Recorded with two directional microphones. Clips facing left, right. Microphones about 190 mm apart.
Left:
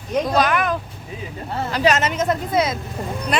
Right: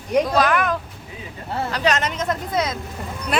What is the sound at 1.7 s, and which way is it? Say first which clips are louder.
Speech: left 4 dB; 5° left (ahead or behind).